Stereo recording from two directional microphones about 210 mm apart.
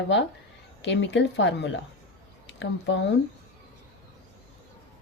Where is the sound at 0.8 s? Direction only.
55° left (ahead or behind).